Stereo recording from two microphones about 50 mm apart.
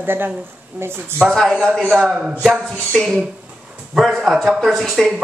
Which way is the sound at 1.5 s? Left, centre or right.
Centre.